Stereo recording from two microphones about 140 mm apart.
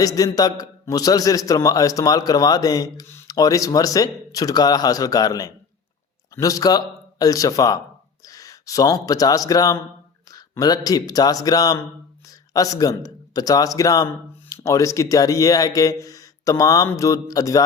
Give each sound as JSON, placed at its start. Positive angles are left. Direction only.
{"t": 0.0, "sound": "a man's voice", "side_deg": 25}